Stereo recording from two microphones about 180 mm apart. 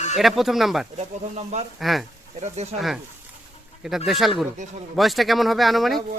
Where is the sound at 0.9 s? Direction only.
40° right (ahead or behind).